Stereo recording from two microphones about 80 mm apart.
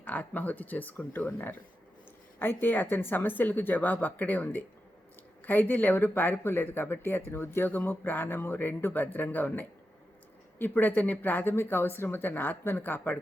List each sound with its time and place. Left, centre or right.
0.0 s speech: centre